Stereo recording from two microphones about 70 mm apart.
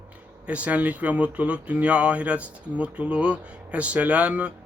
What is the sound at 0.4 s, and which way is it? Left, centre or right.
Speech, centre.